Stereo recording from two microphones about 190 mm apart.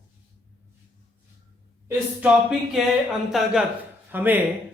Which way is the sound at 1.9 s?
5° right (ahead or behind).